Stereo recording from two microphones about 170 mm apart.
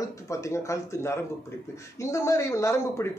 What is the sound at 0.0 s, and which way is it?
A man's voice, 20° left (ahead or behind).